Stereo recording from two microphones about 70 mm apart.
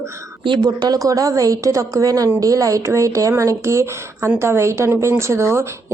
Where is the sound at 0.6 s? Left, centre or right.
Right.